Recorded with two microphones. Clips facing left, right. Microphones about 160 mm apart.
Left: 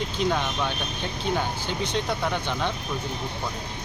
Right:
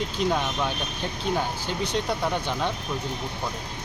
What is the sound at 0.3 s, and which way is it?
Speech, 5° right (ahead or behind).